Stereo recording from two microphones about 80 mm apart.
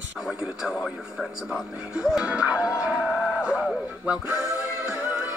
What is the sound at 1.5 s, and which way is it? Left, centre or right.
Speech, centre.